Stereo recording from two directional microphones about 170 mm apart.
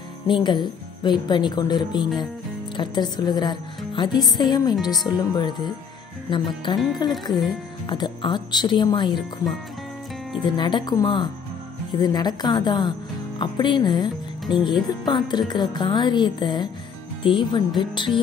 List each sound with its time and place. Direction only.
0.3 s speech: 25° left (ahead or behind)
10.5 s speech: 25° left (ahead or behind)